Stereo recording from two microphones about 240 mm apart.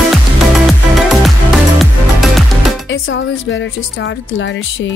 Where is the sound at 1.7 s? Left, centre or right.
Centre.